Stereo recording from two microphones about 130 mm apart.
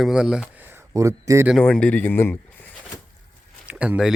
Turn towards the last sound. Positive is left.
turn(degrees=-10)  # may be behind; listen again after turning